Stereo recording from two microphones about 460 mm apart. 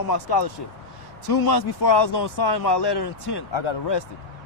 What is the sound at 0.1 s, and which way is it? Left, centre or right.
Speech, left.